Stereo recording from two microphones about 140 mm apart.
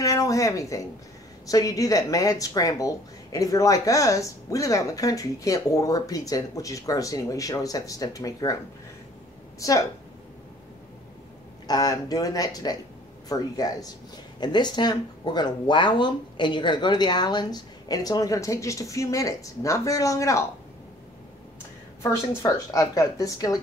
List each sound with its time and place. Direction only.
0.0 s a sound: 25° left (ahead or behind)
1.5 s speech: 25° left (ahead or behind)
9.6 s speech: 25° left (ahead or behind)
11.6 s speech: 25° left (ahead or behind)
22.0 s speech: 20° left (ahead or behind)